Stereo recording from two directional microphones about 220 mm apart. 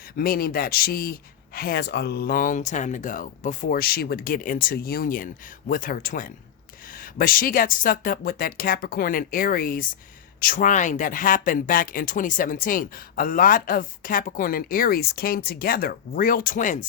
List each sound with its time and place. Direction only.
0.2 s speech: 40° left (ahead or behind)